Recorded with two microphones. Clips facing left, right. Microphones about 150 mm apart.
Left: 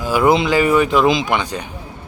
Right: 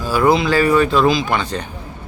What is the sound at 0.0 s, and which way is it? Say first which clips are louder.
Speech: even; 20° left (ahead or behind).